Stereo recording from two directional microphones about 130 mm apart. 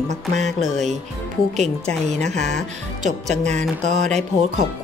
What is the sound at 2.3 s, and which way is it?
Speech, 65° right (ahead or behind).